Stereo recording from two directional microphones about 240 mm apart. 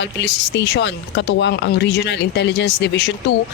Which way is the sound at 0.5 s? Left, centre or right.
Left.